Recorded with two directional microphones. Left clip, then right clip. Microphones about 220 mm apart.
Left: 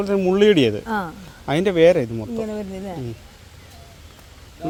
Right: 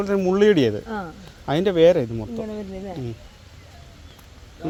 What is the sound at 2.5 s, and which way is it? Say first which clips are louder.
Speech: left 3 dB; 50° left (ahead or behind).